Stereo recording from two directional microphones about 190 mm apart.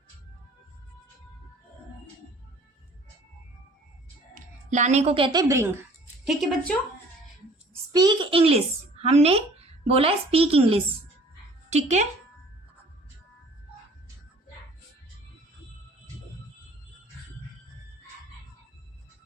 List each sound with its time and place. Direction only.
4.7 s a woman's voice: 35° right (ahead or behind); by 5.7 s 15° right (ahead or behind)
6.2 s speech: centre (ahead or behind)
7.9 s a child's voice: 25° right (ahead or behind)